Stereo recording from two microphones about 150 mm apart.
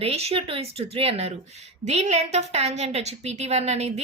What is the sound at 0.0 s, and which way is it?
A woman's voice, 40° right (ahead or behind).